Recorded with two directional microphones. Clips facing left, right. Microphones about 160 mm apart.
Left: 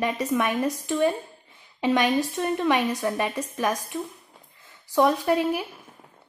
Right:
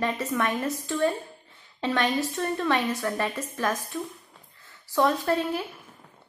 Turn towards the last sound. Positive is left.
turn(degrees=10)  # may be behind; listen again after turning